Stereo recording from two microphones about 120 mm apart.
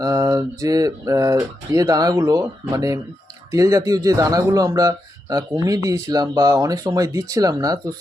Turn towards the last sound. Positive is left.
turn(degrees=-30)  # may be behind; listen again after turning